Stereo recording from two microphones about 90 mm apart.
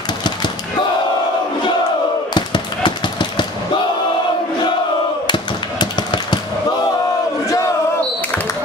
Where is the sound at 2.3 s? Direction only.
60° left (ahead or behind).